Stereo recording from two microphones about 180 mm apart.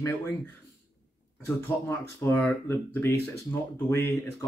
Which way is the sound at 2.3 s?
10° left (ahead or behind).